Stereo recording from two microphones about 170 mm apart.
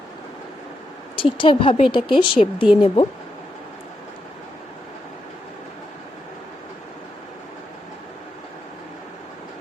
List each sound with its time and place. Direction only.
1.1 s speech: 30° left (ahead or behind)